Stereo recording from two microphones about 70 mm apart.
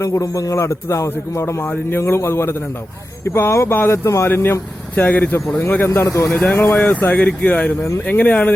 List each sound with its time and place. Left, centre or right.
0.0 s a man's voice: left
1.6 s speech: left
2.0 s speech: left
4.3 s speech: left
6.3 s speech: left